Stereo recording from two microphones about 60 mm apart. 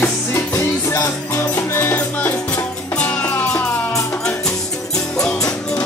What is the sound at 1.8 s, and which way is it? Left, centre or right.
Music, left.